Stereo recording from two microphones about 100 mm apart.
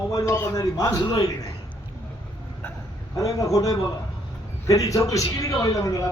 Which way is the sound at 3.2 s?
35° left (ahead or behind).